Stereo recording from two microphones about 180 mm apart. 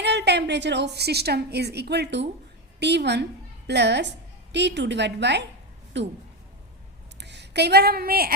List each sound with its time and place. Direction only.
0.0 s a woman's voice: 70° right (ahead or behind)
7.2 s speech: 70° right (ahead or behind); by 8.4 s 55° right (ahead or behind)